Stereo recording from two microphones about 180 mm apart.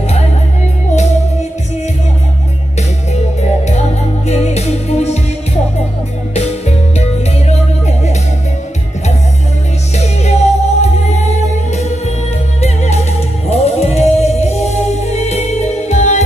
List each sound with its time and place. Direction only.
3.3 s music: 40° left (ahead or behind)
6.3 s music: 35° left (ahead or behind)
9.9 s music: 35° left (ahead or behind)